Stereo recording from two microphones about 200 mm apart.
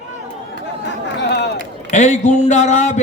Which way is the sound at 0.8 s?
55° left (ahead or behind).